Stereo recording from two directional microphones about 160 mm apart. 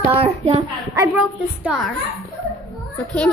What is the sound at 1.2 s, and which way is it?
Speech, 5° right (ahead or behind).